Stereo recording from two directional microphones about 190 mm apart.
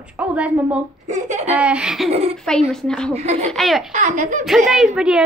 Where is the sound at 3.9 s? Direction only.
40° right (ahead or behind).